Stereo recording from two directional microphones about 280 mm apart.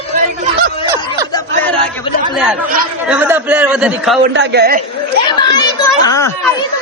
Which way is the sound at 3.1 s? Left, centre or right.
Centre.